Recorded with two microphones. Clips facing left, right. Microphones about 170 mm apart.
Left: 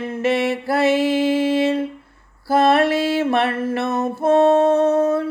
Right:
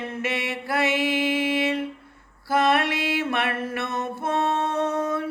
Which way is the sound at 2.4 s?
30° left (ahead or behind).